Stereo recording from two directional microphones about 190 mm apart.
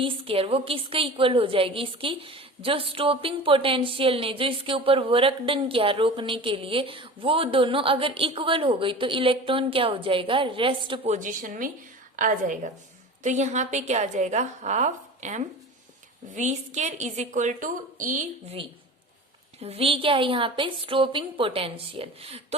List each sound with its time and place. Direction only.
0.0 s a woman's voice: 30° right (ahead or behind); by 18.3 s 45° right (ahead or behind)
19.6 s a woman's voice: 30° right (ahead or behind)